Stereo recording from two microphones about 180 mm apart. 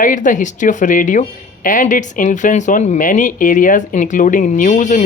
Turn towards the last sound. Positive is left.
turn(degrees=45)  # may be behind; listen again after turning